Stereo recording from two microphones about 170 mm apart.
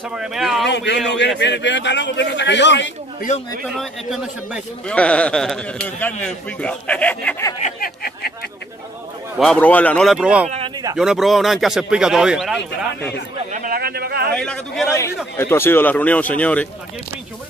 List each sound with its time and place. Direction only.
0.1 s speech: 5° right (ahead or behind)
0.7 s a man's voice: 90° left
3.7 s a man's voice: centre (ahead or behind)
7.8 s a sound: 60° left (ahead or behind)
9.4 s speech: 5° left (ahead or behind)
13.5 s a sound: 55° right (ahead or behind)
14.3 s speech: 5° left (ahead or behind)
14.9 s a man's voice: 15° left (ahead or behind)